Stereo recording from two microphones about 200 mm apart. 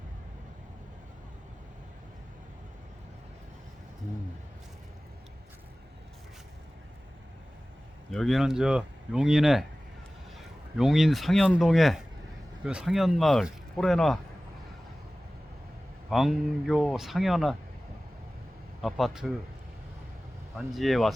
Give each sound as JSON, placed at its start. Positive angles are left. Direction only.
{"t": 8.1, "sound": "speech", "side_deg": 0}
{"t": 16.0, "sound": "speech", "side_deg": 0}
{"t": 18.8, "sound": "speech", "side_deg": 0}
{"t": 20.7, "sound": "speech", "side_deg": 0}